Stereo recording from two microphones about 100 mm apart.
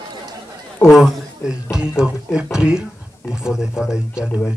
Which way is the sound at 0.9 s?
5° right (ahead or behind).